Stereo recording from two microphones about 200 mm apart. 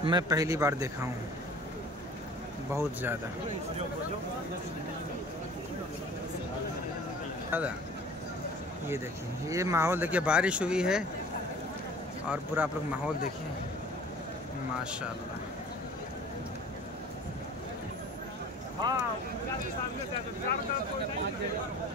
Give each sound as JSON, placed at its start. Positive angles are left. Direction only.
{"t": 0.0, "sound": "speech", "side_deg": -20}
{"t": 2.7, "sound": "speech", "side_deg": -10}
{"t": 7.5, "sound": "speech", "side_deg": -10}
{"t": 9.5, "sound": "speech", "side_deg": -15}
{"t": 12.3, "sound": "speech", "side_deg": -5}
{"t": 14.8, "sound": "speech", "side_deg": -5}
{"t": 18.8, "sound": "speech", "side_deg": -20}